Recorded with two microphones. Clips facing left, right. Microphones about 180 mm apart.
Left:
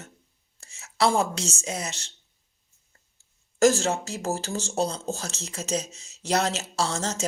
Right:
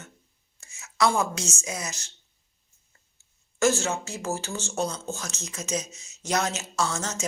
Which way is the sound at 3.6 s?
35° left (ahead or behind).